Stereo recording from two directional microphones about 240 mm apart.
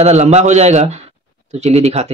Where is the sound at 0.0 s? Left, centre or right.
Right.